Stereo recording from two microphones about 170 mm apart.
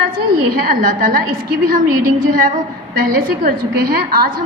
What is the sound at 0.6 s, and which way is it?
Speech, 55° right (ahead or behind).